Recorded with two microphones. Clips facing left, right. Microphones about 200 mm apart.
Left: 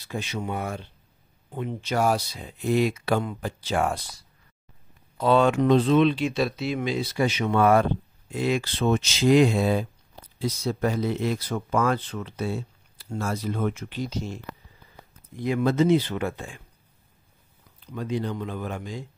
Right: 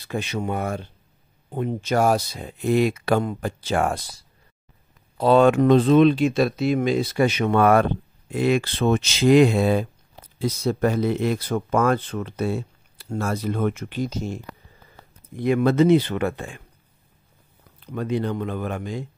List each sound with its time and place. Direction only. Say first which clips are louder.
0.1 s speech: right 4 dB; 60° right (ahead or behind)
5.1 s a sound: right 4 dB; 35° right (ahead or behind)
5.4 s speech: right 5 dB; 50° right (ahead or behind)
15.3 s speech: right 4 dB; 60° right (ahead or behind)
17.7 s speech: right 4 dB; 60° right (ahead or behind)